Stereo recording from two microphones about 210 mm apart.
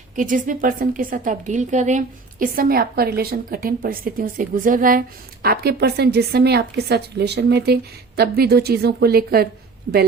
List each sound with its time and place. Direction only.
0.2 s a woman's voice: 40° right (ahead or behind)